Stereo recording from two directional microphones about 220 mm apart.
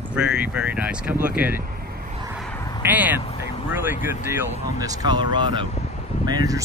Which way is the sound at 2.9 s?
5° right (ahead or behind).